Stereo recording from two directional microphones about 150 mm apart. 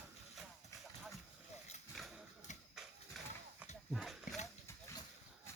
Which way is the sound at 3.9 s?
Centre (ahead or behind).